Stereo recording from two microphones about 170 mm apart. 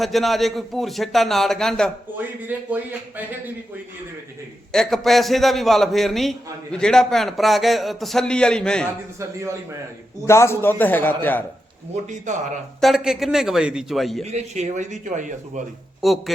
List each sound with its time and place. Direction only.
0.0 s a man's voice: centre (ahead or behind)
2.1 s speech: 10° right (ahead or behind)
4.7 s a man's voice: centre (ahead or behind)
10.2 s a man's voice: 15° left (ahead or behind)
12.0 s a man's voice: 45° right (ahead or behind)
12.8 s a man's voice: centre (ahead or behind)
14.3 s a man's voice: 40° right (ahead or behind)
16.0 s speech: centre (ahead or behind)